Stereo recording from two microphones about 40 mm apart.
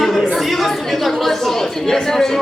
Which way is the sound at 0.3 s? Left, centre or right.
Centre.